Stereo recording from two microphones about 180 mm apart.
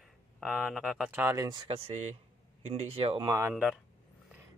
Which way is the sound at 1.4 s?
30° right (ahead or behind).